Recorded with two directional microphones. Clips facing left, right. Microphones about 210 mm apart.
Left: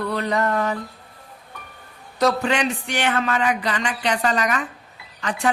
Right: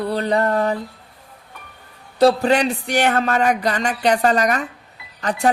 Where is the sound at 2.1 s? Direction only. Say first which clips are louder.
Right 5 dB; 35° right (ahead or behind).